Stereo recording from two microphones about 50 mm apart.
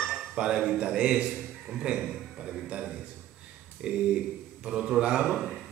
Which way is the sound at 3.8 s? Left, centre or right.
Centre.